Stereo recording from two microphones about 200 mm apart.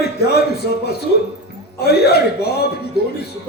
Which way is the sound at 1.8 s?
55° left (ahead or behind).